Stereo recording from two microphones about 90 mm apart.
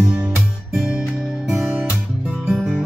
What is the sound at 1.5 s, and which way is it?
Music, 30° right (ahead or behind).